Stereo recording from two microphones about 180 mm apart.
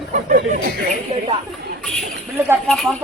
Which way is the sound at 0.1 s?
45° right (ahead or behind).